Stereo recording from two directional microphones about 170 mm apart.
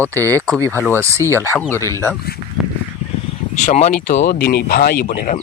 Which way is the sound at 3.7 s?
40° left (ahead or behind).